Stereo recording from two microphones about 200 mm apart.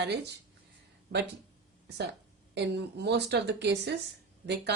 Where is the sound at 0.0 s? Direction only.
55° right (ahead or behind).